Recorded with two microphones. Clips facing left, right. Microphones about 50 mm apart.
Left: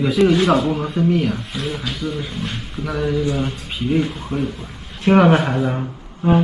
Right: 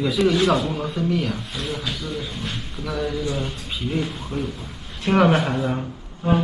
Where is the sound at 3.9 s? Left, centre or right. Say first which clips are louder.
Left 7 dB; centre.